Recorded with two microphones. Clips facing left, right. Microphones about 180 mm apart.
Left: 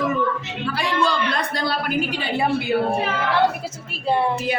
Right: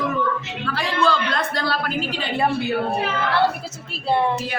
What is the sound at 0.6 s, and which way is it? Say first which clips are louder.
Speech: even; 15° left (ahead or behind).